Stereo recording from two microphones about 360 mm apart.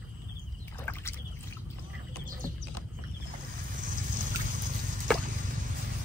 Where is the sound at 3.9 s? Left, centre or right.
Right.